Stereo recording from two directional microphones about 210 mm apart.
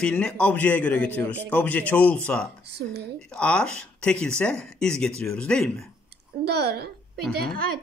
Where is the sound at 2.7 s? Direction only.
50° right (ahead or behind).